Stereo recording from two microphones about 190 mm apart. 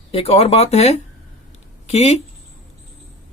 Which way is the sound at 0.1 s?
30° left (ahead or behind).